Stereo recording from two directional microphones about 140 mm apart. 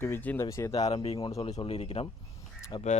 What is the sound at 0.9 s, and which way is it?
Speech, 45° left (ahead or behind).